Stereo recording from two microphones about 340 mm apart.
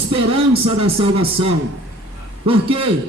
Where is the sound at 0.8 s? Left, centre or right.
Centre.